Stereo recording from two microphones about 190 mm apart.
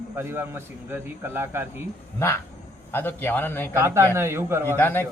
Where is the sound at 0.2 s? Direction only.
10° right (ahead or behind).